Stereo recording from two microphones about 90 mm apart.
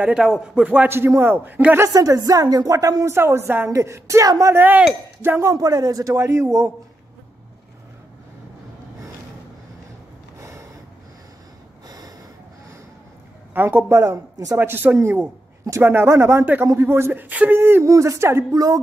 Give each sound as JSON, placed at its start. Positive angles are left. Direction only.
{"t": 0.0, "sound": "a man's voice", "side_deg": -10}
{"t": 0.8, "sound": "a woman's voice", "side_deg": -25}
{"t": 1.9, "sound": "a woman's voice", "side_deg": -45}
{"t": 4.6, "sound": "a woman's voice", "side_deg": -20}
{"t": 5.4, "sound": "a woman's voice", "side_deg": -40}
{"t": 13.5, "sound": "a woman's voice", "side_deg": -20}
{"t": 14.6, "sound": "a woman's voice", "side_deg": -25}